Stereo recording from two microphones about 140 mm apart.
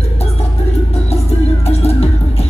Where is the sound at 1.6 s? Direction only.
50° left (ahead or behind).